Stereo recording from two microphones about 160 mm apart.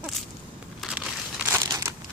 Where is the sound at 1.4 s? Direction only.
20° right (ahead or behind).